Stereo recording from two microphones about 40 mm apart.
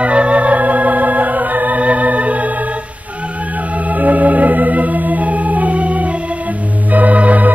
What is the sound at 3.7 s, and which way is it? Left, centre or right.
Organ, right.